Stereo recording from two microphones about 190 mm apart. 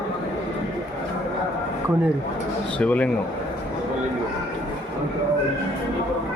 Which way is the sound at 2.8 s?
5° left (ahead or behind).